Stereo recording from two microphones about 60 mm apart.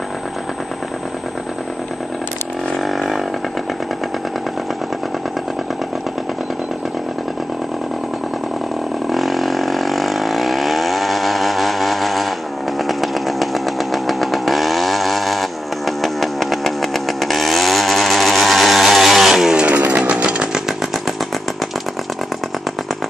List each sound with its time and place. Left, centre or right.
2.7 s a sound: centre
9.1 s vehicle: centre
16.0 s chainsaw: centre
19.6 s chainsaw: right